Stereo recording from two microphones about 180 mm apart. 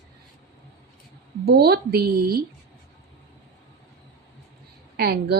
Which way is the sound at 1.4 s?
60° right (ahead or behind).